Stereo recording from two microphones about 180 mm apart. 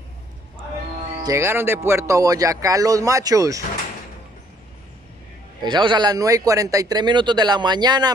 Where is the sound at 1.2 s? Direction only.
15° right (ahead or behind).